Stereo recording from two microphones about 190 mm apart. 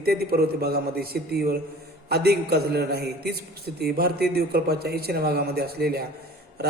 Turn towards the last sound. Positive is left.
turn(degrees=-55)  # may be behind; listen again after turning